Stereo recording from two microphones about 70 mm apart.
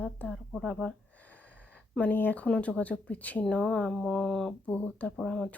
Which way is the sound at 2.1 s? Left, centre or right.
Left.